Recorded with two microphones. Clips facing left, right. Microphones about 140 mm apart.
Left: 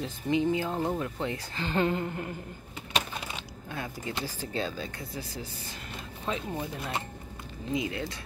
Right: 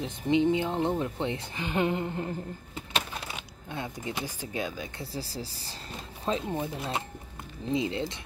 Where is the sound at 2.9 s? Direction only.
5° right (ahead or behind).